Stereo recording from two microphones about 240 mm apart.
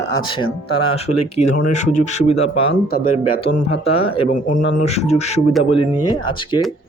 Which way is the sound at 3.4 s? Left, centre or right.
Left.